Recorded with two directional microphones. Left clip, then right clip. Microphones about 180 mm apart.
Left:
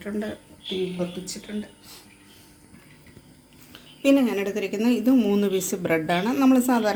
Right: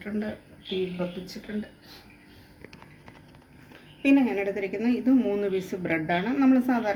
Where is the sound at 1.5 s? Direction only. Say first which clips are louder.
Right 1 dB; 60° left (ahead or behind).